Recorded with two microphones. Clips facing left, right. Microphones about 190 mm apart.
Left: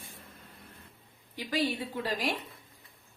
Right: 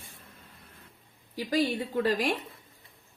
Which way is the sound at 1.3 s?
40° right (ahead or behind).